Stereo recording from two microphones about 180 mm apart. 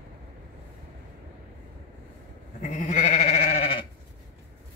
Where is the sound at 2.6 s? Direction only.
40° left (ahead or behind).